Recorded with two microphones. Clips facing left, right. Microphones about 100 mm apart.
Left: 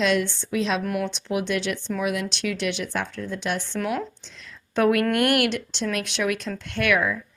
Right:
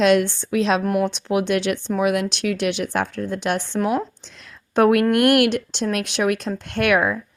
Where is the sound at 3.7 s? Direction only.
35° right (ahead or behind).